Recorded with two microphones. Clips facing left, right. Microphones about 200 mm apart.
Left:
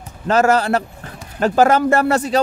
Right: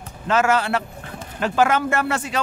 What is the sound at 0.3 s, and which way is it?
Speech, 40° left (ahead or behind).